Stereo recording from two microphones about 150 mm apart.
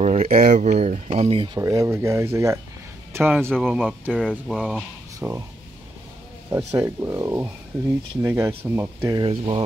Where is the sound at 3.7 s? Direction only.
Centre (ahead or behind).